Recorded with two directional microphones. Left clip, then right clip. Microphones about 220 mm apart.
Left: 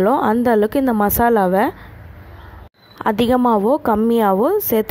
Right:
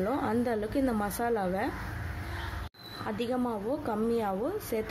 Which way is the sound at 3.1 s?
45° left (ahead or behind).